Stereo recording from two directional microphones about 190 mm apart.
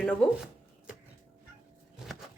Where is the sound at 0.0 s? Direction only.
5° left (ahead or behind).